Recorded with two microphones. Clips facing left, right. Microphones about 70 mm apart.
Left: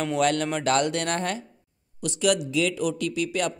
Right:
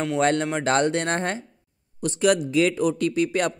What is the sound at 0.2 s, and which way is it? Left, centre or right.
A man's voice, right.